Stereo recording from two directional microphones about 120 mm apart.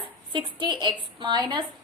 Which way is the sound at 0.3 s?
40° right (ahead or behind).